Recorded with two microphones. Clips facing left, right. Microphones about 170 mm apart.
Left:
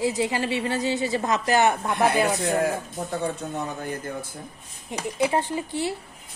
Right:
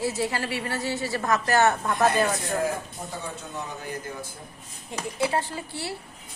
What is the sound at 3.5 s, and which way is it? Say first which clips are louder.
Speech: left 4 dB; 55° left (ahead or behind).